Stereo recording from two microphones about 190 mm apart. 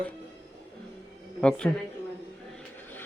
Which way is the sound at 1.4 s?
5° left (ahead or behind).